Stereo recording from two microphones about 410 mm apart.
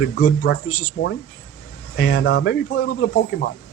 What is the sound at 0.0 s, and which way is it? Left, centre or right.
Speech, left.